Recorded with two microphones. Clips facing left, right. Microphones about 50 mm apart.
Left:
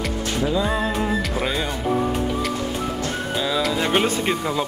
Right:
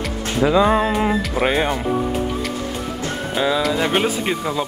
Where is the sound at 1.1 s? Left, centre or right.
Centre.